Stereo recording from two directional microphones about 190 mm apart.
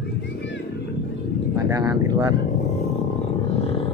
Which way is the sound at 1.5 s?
20° right (ahead or behind).